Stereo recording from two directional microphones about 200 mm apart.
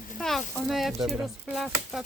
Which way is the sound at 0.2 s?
Centre (ahead or behind).